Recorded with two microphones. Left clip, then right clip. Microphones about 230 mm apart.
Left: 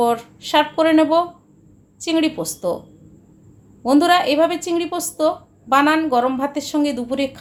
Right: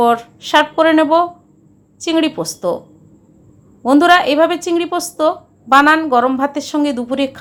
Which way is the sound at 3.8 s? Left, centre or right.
Centre.